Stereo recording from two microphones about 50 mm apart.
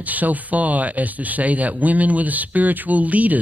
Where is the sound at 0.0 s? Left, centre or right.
Right.